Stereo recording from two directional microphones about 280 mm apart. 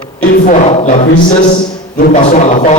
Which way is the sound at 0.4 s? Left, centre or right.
Left.